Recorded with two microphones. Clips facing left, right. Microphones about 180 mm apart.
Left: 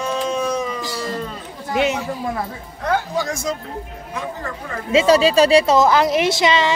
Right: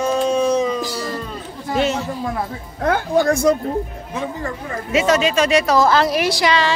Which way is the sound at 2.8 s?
55° right (ahead or behind).